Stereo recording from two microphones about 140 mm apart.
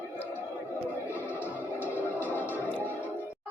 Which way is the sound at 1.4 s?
15° left (ahead or behind).